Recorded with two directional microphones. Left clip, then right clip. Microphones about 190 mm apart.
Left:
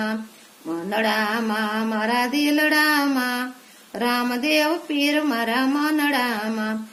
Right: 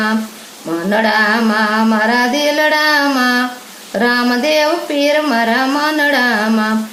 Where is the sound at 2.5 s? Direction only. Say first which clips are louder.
Right 5 dB; 35° left (ahead or behind).